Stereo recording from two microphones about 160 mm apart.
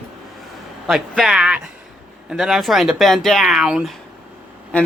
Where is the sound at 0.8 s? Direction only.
Centre (ahead or behind).